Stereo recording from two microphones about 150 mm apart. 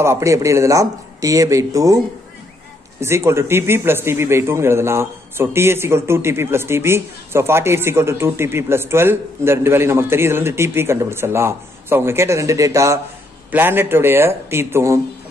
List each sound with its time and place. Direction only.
0.0 s speech: 20° right (ahead or behind)
3.0 s a man's voice: 20° right (ahead or behind)